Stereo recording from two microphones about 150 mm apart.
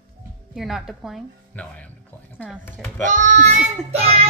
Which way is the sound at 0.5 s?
Centre (ahead or behind).